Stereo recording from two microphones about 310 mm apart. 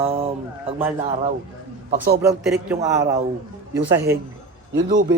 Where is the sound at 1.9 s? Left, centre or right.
Right.